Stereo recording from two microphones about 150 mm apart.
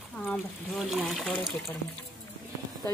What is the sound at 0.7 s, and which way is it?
Speech, centre (ahead or behind).